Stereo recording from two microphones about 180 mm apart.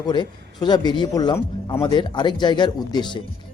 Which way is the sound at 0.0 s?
25° left (ahead or behind).